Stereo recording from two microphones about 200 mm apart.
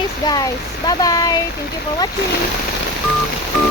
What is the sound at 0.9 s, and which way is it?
Speech, 20° left (ahead or behind).